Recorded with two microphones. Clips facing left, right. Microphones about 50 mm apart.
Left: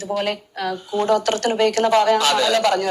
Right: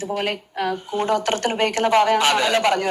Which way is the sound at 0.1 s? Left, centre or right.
Right.